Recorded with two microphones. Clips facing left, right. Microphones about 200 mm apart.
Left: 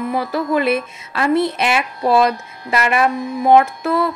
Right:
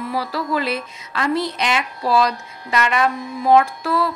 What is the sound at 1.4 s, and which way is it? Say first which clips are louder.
Music: left 4 dB; 60° left (ahead or behind).